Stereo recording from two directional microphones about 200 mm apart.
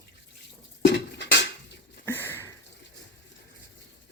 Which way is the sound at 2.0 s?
10° left (ahead or behind).